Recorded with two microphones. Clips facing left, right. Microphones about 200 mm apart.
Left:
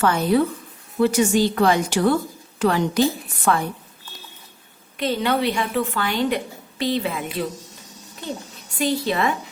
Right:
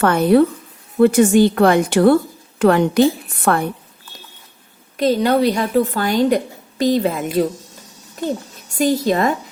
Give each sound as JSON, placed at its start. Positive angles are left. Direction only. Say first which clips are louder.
{"t": 0.0, "sound": "a woman's voice", "louder": "right 6 dB", "side_deg": -55}
{"t": 4.9, "sound": "a woman's voice", "louder": "right 6 dB", "side_deg": -40}
{"t": 8.8, "sound": "a woman's voice", "louder": "right 5 dB", "side_deg": -45}